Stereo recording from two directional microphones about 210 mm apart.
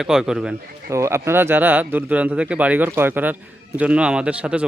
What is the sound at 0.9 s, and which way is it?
Speech, 15° right (ahead or behind).